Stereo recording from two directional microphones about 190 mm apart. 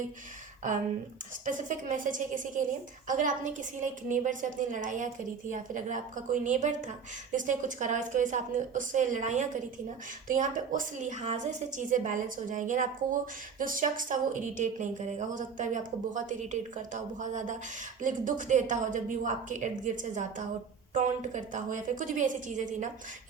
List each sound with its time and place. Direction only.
1.5 s a woman's voice: 45° right (ahead or behind)